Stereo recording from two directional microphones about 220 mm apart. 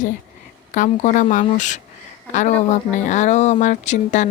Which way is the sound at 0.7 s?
35° left (ahead or behind).